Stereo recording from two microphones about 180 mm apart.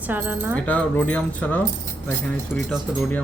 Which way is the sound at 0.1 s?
10° right (ahead or behind).